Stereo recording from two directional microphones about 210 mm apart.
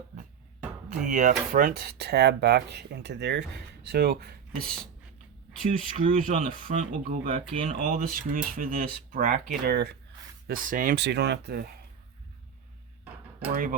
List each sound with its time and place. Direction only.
1.0 s speech: 35° right (ahead or behind)
6.1 s speech: 40° right (ahead or behind)
7.3 s speech: 25° right (ahead or behind); by 10.0 s 50° right (ahead or behind)
10.4 s speech: 40° right (ahead or behind)
13.5 s speech: 40° right (ahead or behind)